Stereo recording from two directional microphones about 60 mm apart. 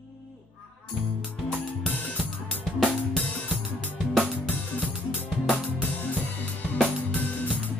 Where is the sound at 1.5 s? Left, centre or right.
Centre.